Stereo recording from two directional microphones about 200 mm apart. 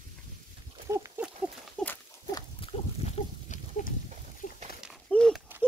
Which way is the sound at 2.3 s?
25° left (ahead or behind).